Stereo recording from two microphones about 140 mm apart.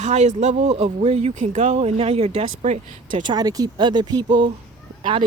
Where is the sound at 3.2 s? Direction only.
30° right (ahead or behind).